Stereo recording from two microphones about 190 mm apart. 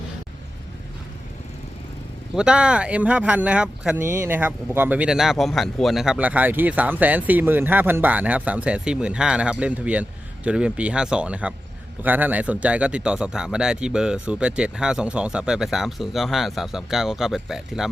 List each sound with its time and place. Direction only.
2.3 s speech: 5° right (ahead or behind)